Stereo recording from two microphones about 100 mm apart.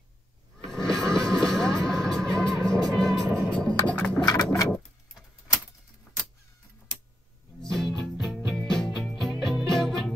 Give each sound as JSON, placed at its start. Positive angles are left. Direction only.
{"t": 0.7, "sound": "music", "side_deg": 5}
{"t": 3.5, "sound": "music", "side_deg": 10}
{"t": 4.3, "sound": "a sound", "side_deg": 40}
{"t": 7.6, "sound": "music", "side_deg": 5}